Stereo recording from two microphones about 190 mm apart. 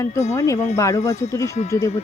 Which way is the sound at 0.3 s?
15° left (ahead or behind).